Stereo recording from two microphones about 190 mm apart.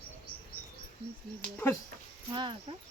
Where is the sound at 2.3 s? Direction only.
25° right (ahead or behind).